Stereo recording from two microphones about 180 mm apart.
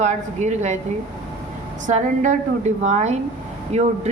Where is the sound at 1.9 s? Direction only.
45° right (ahead or behind).